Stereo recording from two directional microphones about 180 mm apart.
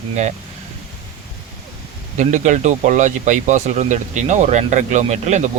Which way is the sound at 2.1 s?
40° right (ahead or behind).